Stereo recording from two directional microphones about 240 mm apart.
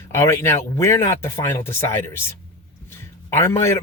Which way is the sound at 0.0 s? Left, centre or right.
Centre.